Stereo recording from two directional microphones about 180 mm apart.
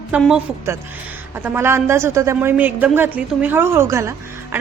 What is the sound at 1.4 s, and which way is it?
A woman's voice, 15° right (ahead or behind).